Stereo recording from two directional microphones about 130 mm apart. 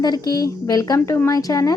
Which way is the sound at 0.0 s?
30° left (ahead or behind).